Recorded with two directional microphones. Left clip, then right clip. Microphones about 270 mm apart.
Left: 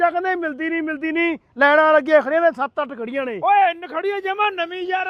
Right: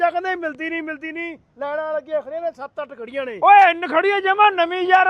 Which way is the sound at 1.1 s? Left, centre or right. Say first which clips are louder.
Left 9 dB; left.